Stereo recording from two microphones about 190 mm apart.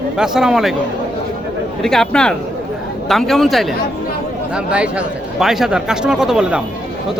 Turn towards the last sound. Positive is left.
turn(degrees=-5)  # may be behind; listen again after turning